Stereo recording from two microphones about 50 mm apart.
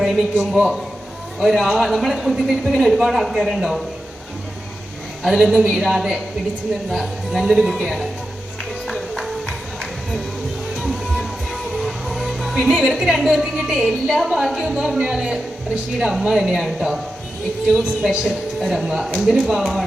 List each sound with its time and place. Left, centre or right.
0.0 s speech: centre
5.2 s speech: centre
8.9 s music: centre
10.8 s music: centre
12.8 s a woman's voice: centre
18.1 s speech: centre